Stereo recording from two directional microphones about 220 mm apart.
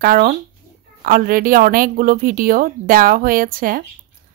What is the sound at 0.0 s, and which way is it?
A woman's voice, 40° right (ahead or behind).